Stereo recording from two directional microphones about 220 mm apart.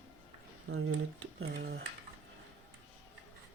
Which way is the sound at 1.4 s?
50° right (ahead or behind).